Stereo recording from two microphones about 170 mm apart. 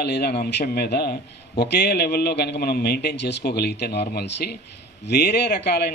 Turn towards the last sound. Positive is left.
turn(degrees=70)  # may be behind; listen again after turning